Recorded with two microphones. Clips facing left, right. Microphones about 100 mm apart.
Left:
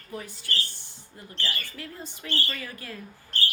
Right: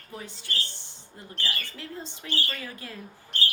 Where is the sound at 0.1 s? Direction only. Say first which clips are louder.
Left 2 dB; 25° right (ahead or behind).